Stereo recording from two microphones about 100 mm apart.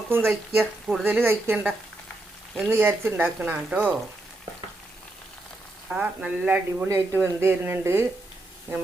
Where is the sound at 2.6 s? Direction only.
25° right (ahead or behind).